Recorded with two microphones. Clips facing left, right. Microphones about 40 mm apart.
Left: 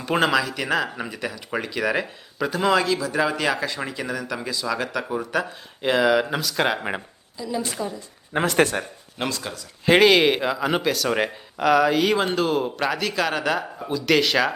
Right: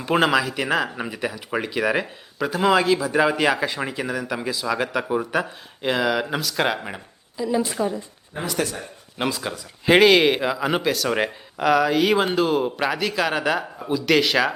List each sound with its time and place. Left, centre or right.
0.0 s speech: centre
7.3 s speech: centre
8.3 s speech: left
9.1 s speech: centre
9.9 s speech: centre